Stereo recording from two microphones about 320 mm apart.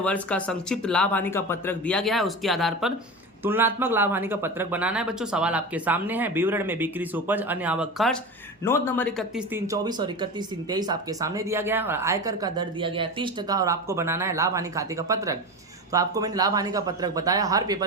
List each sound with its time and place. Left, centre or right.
0.0 s a woman's voice: centre